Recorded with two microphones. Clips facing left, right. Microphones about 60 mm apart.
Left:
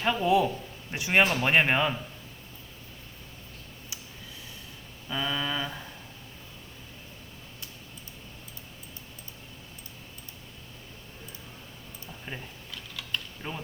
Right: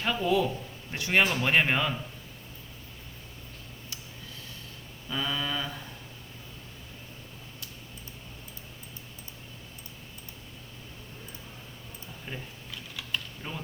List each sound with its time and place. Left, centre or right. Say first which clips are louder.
0.0 s speech: left 3 dB; centre
5.0 s speech: left 1 dB; centre
12.3 s speech: even; centre
13.0 s typing: even; centre
13.4 s speech: left 2 dB; centre